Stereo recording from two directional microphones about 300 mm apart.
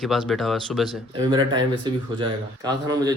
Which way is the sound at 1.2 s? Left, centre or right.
Centre.